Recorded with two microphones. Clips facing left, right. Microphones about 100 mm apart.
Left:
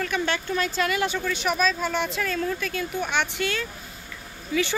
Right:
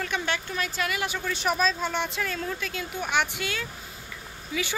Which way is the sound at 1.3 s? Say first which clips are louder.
Left 1 dB; 35° right (ahead or behind).